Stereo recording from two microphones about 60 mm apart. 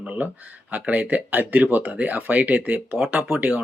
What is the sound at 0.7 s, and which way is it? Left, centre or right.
Speech, right.